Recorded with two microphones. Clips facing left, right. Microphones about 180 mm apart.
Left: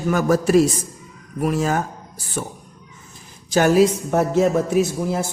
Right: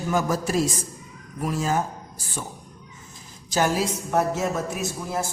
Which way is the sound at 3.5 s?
65° left (ahead or behind).